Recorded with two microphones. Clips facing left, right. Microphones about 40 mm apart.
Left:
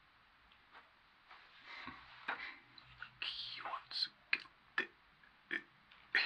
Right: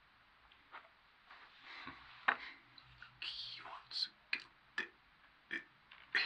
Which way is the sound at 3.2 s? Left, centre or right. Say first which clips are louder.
Left 2 dB; centre.